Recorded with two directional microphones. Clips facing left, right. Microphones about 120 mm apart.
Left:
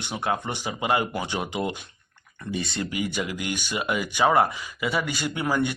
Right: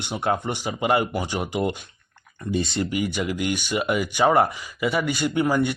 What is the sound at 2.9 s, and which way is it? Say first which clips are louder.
Speech: right 2 dB; 45° right (ahead or behind).